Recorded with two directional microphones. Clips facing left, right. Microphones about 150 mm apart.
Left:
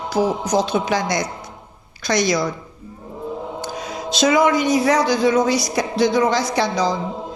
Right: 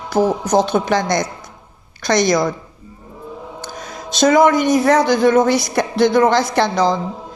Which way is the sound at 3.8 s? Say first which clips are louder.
Right 3 dB; 50° right (ahead or behind).